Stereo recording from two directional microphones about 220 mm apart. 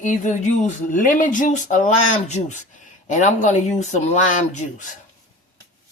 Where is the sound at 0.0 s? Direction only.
35° left (ahead or behind).